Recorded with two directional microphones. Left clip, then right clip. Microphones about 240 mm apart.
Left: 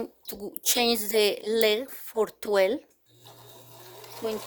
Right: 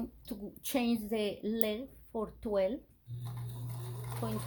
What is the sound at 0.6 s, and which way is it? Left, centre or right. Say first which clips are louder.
Speech: left 10 dB; left.